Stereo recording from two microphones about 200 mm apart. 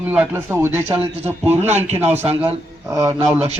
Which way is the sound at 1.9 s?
10° right (ahead or behind).